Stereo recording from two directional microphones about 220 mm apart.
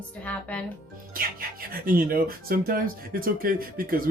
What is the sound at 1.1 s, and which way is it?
Speech, 40° right (ahead or behind).